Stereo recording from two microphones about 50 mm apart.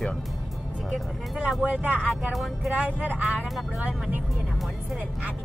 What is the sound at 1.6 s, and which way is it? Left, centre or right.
Speech, right.